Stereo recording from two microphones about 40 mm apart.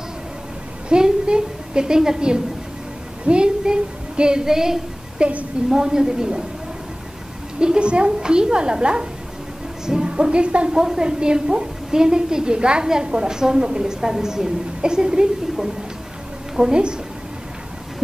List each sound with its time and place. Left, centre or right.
0.8 s a woman's voice: right
5.2 s a woman's voice: right
5.7 s a woman's voice: centre
7.6 s a woman's voice: right
10.7 s a woman's voice: centre
16.5 s a woman's voice: centre